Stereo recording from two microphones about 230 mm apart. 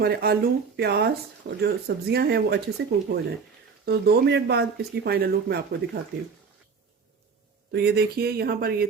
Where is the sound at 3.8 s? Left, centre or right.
Right.